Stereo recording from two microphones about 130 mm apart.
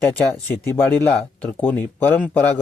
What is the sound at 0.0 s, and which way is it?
Speech, 15° left (ahead or behind).